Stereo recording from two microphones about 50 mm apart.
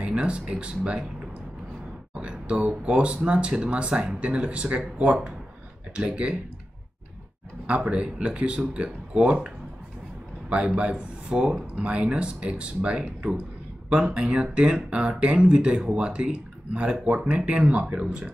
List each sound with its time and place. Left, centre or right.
0.0 s speech: right
2.1 s speech: right
7.6 s speech: right
10.8 s speech: right